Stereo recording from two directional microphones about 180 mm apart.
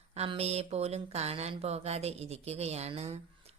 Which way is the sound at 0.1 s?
35° right (ahead or behind).